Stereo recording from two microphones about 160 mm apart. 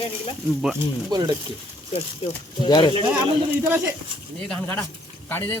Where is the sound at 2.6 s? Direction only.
30° left (ahead or behind).